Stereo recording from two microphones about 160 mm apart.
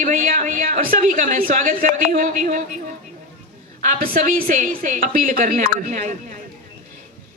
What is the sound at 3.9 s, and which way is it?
A woman's voice, 65° right (ahead or behind).